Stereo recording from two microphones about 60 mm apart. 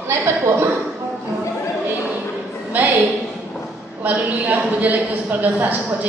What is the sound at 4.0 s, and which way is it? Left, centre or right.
Speech, right.